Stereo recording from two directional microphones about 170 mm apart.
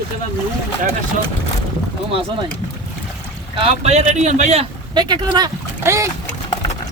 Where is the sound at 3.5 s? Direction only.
35° right (ahead or behind).